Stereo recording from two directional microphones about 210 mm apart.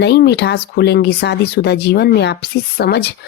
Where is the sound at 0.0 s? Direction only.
50° left (ahead or behind).